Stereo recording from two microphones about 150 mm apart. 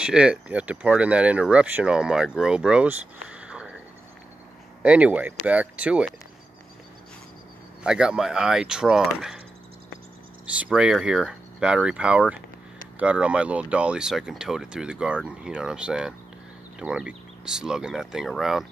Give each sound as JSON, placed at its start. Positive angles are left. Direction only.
{"t": 0.0, "sound": "speech", "side_deg": -5}
{"t": 4.8, "sound": "speech", "side_deg": -10}
{"t": 7.8, "sound": "speech", "side_deg": -5}
{"t": 10.6, "sound": "speech", "side_deg": -5}